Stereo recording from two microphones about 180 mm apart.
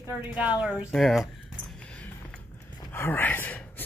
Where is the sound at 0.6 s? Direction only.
5° right (ahead or behind).